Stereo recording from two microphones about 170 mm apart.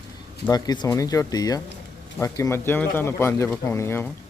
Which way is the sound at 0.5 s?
25° left (ahead or behind).